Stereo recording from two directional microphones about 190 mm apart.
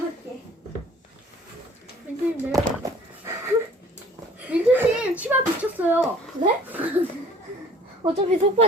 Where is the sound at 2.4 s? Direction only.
15° right (ahead or behind).